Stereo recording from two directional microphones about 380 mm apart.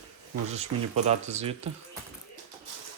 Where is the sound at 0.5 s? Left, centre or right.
Centre.